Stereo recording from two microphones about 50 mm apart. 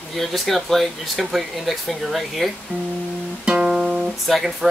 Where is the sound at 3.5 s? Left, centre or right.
Right.